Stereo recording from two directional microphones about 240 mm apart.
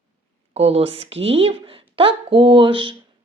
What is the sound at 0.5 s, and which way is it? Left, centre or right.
Speech, right.